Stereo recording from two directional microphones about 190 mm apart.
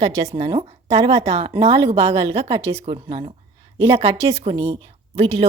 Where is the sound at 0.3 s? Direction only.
30° right (ahead or behind).